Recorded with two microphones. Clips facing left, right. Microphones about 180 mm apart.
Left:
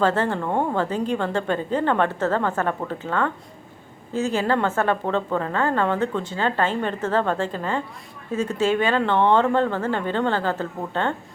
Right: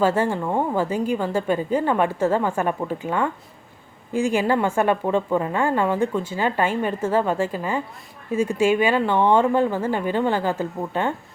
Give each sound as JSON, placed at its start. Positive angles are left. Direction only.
{"t": 0.0, "sound": "a woman's voice", "side_deg": -10}